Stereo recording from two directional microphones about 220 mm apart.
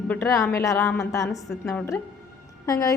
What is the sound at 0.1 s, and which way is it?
A woman's voice, 15° left (ahead or behind).